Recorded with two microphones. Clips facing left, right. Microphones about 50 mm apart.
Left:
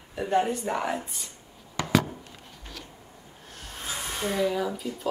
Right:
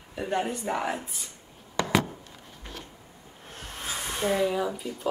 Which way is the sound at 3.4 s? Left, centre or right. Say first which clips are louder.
Right 3 dB; right.